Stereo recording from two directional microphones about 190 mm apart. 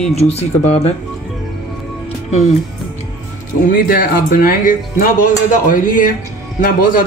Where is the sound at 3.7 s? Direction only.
50° left (ahead or behind).